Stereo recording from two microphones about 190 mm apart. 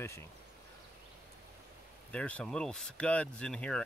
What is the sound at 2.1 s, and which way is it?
Speech, 5° left (ahead or behind).